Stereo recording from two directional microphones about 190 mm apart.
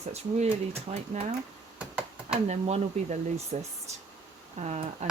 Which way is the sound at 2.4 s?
35° right (ahead or behind).